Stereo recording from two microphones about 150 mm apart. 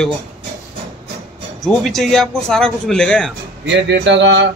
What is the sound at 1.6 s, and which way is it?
A man's voice, centre (ahead or behind).